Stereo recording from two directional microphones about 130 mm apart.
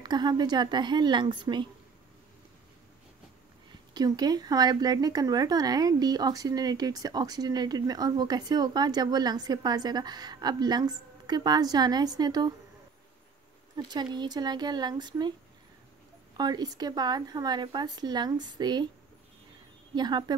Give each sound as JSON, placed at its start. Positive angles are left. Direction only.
{"t": 0.0, "sound": "speech", "side_deg": -35}
{"t": 3.9, "sound": "speech", "side_deg": -30}
{"t": 13.7, "sound": "speech", "side_deg": -35}
{"t": 16.3, "sound": "speech", "side_deg": -30}
{"t": 20.0, "sound": "speech", "side_deg": -35}